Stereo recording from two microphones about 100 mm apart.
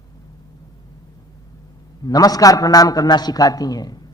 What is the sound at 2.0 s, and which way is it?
A man's voice, 40° left (ahead or behind).